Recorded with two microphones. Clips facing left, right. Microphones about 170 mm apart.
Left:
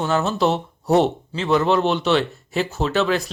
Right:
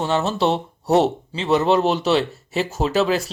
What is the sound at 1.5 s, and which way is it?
A man's voice, 35° right (ahead or behind).